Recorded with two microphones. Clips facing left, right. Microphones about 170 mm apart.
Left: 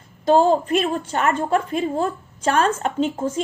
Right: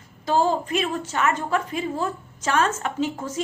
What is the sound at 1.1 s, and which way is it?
A woman's voice, 35° left (ahead or behind).